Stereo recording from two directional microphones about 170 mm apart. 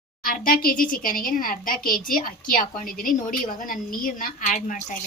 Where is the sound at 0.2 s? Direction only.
55° left (ahead or behind).